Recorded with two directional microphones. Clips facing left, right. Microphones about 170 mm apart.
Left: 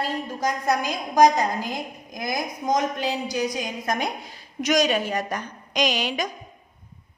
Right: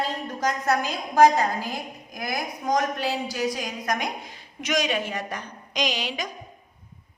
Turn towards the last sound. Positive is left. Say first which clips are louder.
# left 4 dB
turn(degrees=50)  # may be behind; listen again after turning